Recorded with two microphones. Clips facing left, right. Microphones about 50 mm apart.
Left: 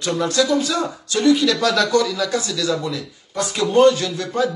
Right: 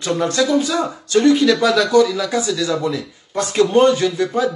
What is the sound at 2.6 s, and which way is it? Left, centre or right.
A man's voice, right.